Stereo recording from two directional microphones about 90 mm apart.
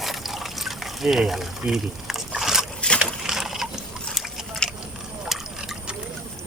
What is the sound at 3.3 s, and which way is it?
Ratchet, 5° right (ahead or behind).